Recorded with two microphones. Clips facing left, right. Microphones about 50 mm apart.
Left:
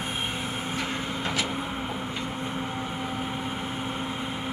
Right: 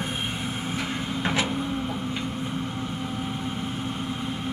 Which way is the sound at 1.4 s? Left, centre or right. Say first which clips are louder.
Right 3 dB; centre.